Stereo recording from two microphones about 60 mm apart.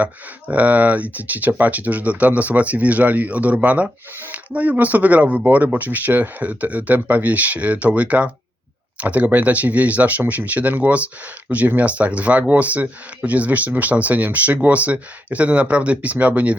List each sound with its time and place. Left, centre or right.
0.0 s speech: right